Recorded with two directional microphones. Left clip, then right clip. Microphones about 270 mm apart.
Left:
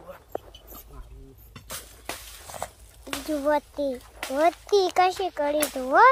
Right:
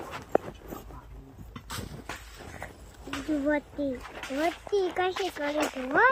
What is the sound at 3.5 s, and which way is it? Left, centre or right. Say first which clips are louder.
A child's voice: left 7 dB; left.